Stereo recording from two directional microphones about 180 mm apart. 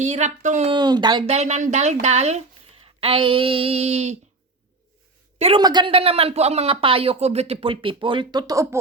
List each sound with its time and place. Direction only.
0.0 s speech: 40° right (ahead or behind)
0.7 s speech: 25° right (ahead or behind)
1.3 s speech: 40° right (ahead or behind)
5.4 s speech: 30° right (ahead or behind)